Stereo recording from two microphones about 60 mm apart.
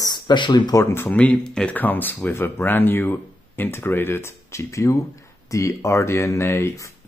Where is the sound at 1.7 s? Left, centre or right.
Left.